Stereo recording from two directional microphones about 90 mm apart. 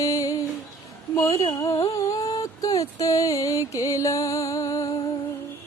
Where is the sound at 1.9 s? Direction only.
40° left (ahead or behind).